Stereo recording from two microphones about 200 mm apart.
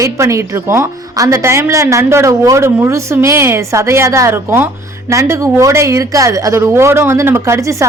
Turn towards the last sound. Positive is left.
turn(degrees=-15)  # may be behind; listen again after turning